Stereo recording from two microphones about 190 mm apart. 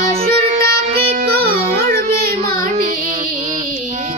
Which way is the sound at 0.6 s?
55° right (ahead or behind).